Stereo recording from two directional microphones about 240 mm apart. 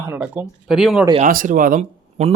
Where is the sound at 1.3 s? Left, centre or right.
Right.